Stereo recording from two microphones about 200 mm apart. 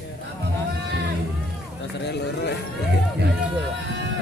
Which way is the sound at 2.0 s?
55° left (ahead or behind).